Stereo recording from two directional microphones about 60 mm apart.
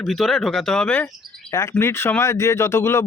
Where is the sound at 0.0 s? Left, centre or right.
Centre.